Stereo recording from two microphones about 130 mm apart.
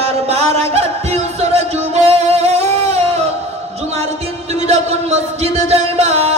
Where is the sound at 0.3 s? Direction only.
55° right (ahead or behind).